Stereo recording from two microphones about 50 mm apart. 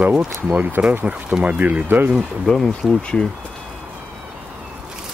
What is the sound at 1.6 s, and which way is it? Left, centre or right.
Speech, right.